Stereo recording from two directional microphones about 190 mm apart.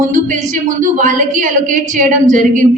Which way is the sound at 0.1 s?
40° right (ahead or behind).